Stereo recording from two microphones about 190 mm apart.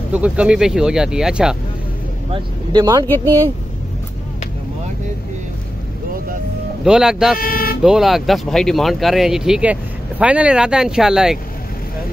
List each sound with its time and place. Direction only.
0.1 s speech: 5° right (ahead or behind)
2.3 s speech: 20° right (ahead or behind)
3.1 s speech: 10° left (ahead or behind)
6.8 s speech: 5° right (ahead or behind)
7.3 s speech: 50° left (ahead or behind)
7.8 s speech: centre (ahead or behind)